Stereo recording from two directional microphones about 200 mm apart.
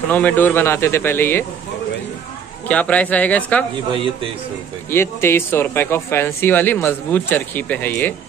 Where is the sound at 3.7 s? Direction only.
25° right (ahead or behind).